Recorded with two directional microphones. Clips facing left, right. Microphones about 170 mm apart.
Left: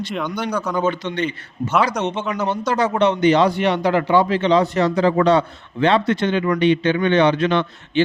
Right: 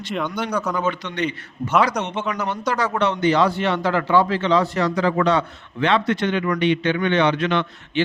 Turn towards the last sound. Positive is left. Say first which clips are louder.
# left 3 dB
turn(degrees=35)  # may be behind; listen again after turning